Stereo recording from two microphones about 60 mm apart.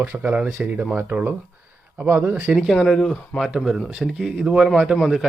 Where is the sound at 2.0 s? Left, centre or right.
Right.